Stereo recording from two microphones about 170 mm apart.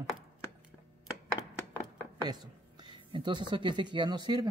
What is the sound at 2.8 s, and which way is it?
Speech, 30° right (ahead or behind).